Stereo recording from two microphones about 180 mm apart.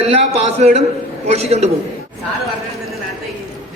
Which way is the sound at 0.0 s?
35° right (ahead or behind).